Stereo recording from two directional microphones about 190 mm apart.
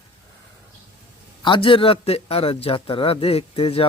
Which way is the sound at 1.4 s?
25° left (ahead or behind).